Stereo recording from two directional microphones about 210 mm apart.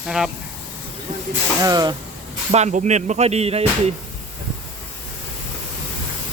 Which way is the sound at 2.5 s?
30° right (ahead or behind).